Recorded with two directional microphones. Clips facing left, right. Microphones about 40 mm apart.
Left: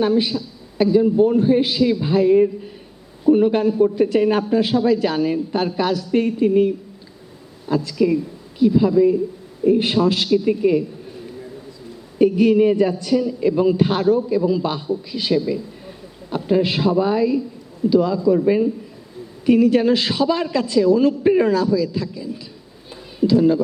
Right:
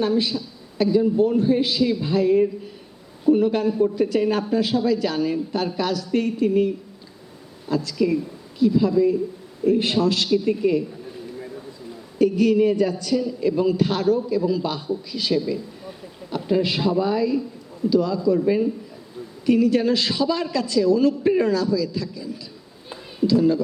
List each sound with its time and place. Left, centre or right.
0.0 s a man's voice: left
7.7 s a man's voice: left
12.2 s a man's voice: left
19.5 s a man's voice: left